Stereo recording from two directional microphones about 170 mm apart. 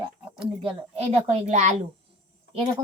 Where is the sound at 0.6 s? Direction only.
35° right (ahead or behind).